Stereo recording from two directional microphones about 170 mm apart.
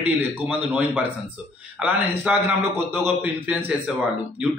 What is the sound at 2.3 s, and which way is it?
A man's voice, 5° right (ahead or behind).